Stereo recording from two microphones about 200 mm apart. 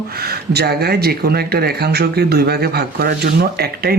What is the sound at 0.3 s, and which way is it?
Speech, 55° right (ahead or behind).